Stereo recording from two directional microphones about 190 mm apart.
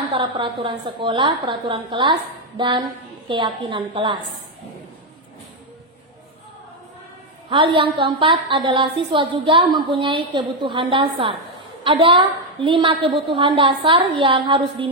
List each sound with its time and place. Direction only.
0.1 s a woman's voice: 25° right (ahead or behind)
7.4 s a woman's voice: 25° right (ahead or behind)